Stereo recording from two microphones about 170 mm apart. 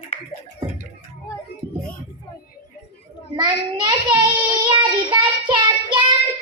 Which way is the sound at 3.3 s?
25° right (ahead or behind).